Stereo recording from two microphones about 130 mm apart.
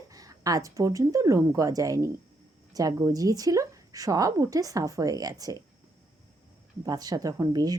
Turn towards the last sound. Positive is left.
turn(degrees=-30)  # may be behind; listen again after turning